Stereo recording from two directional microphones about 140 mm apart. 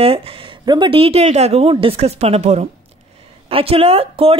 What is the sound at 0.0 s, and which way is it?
A woman's voice, 45° right (ahead or behind).